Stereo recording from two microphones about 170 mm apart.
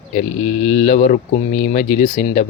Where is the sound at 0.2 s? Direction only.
40° left (ahead or behind).